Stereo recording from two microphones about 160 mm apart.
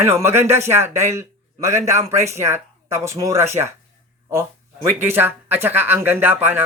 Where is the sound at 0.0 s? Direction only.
15° right (ahead or behind).